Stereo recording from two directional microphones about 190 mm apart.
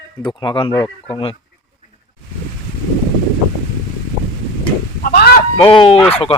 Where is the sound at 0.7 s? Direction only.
15° left (ahead or behind).